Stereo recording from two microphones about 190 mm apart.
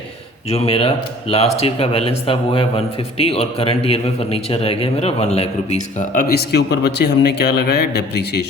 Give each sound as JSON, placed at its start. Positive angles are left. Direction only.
{"t": 0.5, "sound": "speech", "side_deg": 30}
{"t": 6.0, "sound": "speech", "side_deg": 50}